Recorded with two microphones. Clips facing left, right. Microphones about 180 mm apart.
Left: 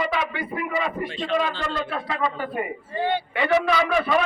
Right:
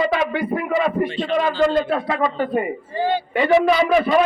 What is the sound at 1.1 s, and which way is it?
Speech, centre (ahead or behind).